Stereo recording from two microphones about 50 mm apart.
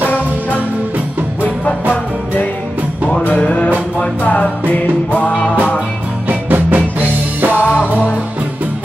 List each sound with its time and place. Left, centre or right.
3.3 s music: left
6.2 s music: right